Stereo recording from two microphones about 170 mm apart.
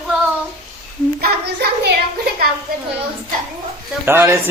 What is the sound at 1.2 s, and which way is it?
Speech, 70° right (ahead or behind).